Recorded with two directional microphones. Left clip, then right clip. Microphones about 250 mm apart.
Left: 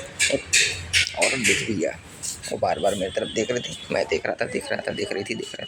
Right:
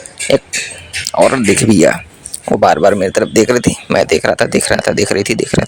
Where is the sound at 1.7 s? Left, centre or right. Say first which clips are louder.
Right 17 dB; right.